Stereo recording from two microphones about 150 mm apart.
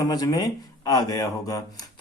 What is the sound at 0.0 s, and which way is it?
Speech, 25° left (ahead or behind).